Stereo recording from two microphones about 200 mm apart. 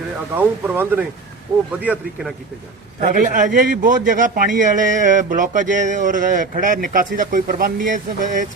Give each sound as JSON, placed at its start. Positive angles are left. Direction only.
{"t": 0.3, "sound": "speech", "side_deg": -10}
{"t": 3.0, "sound": "a man's voice", "side_deg": -40}